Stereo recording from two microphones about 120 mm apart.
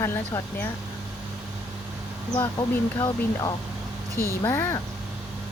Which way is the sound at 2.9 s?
30° left (ahead or behind).